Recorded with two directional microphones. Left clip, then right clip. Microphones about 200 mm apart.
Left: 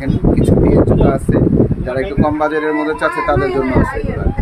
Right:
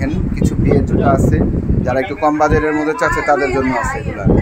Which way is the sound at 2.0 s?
35° right (ahead or behind).